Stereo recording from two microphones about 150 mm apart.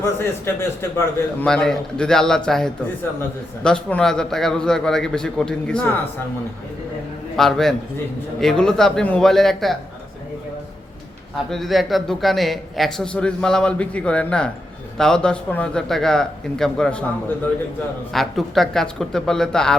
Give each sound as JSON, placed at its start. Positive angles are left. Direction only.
{"t": 0.0, "sound": "a man's voice", "side_deg": 15}
{"t": 1.5, "sound": "a man's voice", "side_deg": 5}
{"t": 7.3, "sound": "a man's voice", "side_deg": 0}
{"t": 11.5, "sound": "a man's voice", "side_deg": 0}